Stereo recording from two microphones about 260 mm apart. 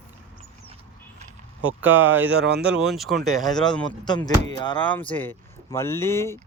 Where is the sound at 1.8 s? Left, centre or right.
Centre.